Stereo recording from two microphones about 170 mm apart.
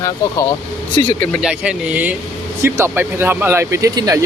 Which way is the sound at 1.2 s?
5° right (ahead or behind).